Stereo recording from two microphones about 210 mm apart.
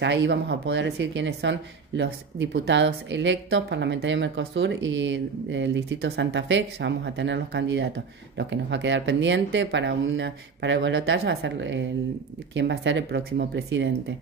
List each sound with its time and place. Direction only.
0.0 s speech: 60° right (ahead or behind)